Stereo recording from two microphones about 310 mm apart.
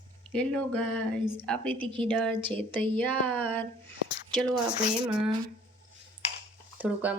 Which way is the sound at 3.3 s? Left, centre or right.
Centre.